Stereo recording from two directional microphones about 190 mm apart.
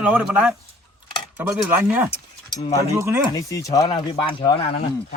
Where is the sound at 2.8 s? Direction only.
15° right (ahead or behind).